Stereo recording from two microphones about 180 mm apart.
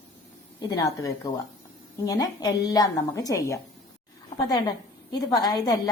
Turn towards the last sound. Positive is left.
turn(degrees=20)  # may be behind; listen again after turning